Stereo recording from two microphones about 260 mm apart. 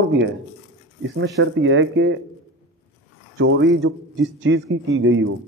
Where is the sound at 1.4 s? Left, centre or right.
Right.